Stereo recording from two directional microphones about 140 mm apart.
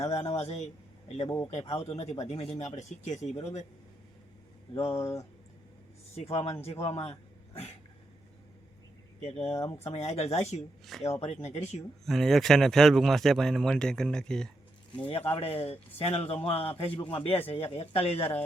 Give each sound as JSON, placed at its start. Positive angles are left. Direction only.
{"t": 0.1, "sound": "speech", "side_deg": 50}
{"t": 2.7, "sound": "speech", "side_deg": 55}
{"t": 4.7, "sound": "speech", "side_deg": 20}
{"t": 6.1, "sound": "speech", "side_deg": 45}
{"t": 9.2, "sound": "speech", "side_deg": 45}
{"t": 9.6, "sound": "speech", "side_deg": 25}
{"t": 9.8, "sound": "speech", "side_deg": 50}
{"t": 12.0, "sound": "speech", "side_deg": 0}
{"t": 15.0, "sound": "speech", "side_deg": 40}